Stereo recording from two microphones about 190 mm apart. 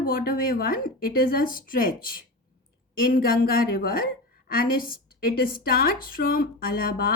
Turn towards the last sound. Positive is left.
turn(degrees=50)  # may be behind; listen again after turning